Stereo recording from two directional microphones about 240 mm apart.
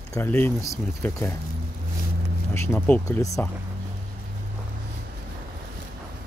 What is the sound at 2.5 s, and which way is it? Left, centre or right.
Speech, centre.